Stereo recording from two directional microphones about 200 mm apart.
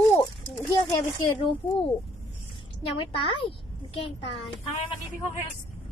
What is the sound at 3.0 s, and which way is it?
A child's voice, 25° left (ahead or behind).